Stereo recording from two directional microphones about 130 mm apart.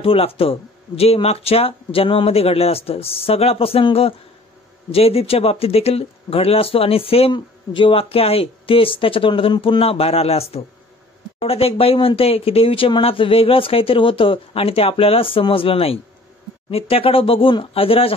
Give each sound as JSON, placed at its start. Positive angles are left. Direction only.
{"t": 0.0, "sound": "speech", "side_deg": 45}